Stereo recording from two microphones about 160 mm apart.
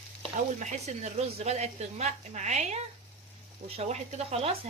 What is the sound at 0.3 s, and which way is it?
A woman's voice, 50° right (ahead or behind).